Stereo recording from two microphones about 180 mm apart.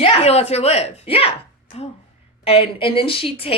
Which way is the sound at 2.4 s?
35° left (ahead or behind).